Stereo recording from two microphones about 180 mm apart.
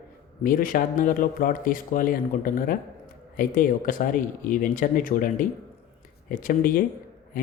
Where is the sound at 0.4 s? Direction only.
50° left (ahead or behind).